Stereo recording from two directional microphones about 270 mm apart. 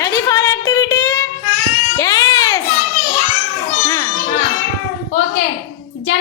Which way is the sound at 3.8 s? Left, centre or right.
Centre.